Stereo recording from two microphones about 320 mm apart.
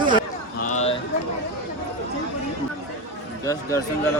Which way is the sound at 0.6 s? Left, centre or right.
Left.